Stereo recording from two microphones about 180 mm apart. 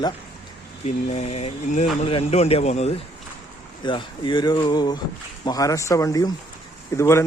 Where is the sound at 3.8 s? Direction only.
25° left (ahead or behind).